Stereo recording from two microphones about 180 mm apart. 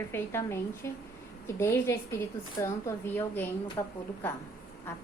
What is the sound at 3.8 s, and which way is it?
Speech, 20° left (ahead or behind).